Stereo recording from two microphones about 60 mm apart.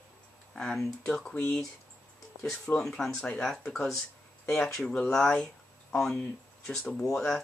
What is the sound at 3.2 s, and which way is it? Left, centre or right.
Speech, centre.